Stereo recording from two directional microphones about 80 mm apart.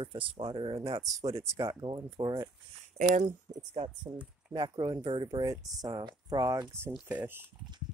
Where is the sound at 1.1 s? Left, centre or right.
Right.